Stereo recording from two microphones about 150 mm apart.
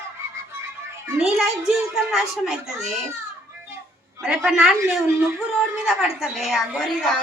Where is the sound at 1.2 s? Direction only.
5° right (ahead or behind).